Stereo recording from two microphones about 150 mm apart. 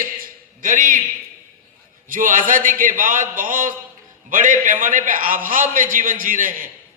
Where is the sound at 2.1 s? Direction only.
65° right (ahead or behind).